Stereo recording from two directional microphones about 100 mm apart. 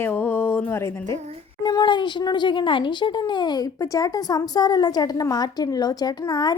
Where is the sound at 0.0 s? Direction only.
20° left (ahead or behind).